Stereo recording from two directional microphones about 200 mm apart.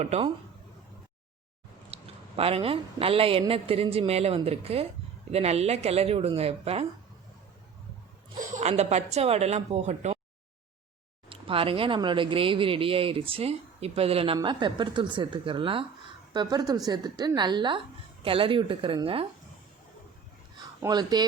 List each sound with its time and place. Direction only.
0.0 s a woman's voice: 30° right (ahead or behind)
1.9 s a woman's voice: 30° right (ahead or behind)
8.5 s a woman's voice: 35° right (ahead or behind)
11.3 s speech: 25° right (ahead or behind)
20.8 s speech: 20° right (ahead or behind)